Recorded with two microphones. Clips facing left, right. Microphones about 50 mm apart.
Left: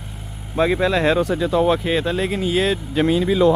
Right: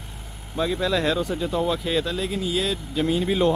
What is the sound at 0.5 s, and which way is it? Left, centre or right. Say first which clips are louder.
Speech: left 6 dB; left.